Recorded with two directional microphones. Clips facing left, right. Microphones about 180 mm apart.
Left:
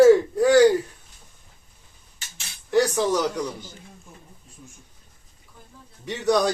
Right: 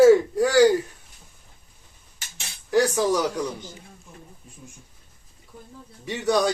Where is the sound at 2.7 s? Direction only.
10° right (ahead or behind).